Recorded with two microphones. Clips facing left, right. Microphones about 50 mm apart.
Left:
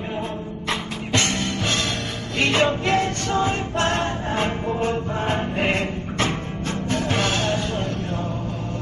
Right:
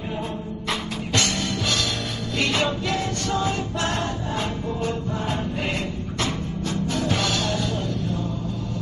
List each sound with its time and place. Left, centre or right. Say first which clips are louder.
1.1 s music: left 2 dB; left